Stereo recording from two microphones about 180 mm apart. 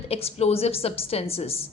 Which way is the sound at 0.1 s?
35° left (ahead or behind).